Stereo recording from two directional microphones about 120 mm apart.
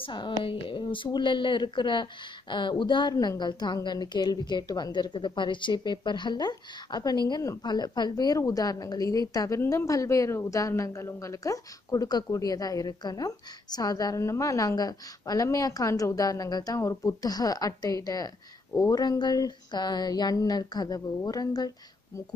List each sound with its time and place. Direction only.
0.0 s a woman's voice: 45° left (ahead or behind)